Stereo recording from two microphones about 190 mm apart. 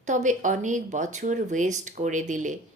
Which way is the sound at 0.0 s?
40° right (ahead or behind).